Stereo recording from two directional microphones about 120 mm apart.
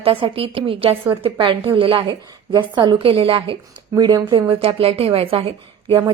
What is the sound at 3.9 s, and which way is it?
A woman's voice, 35° right (ahead or behind).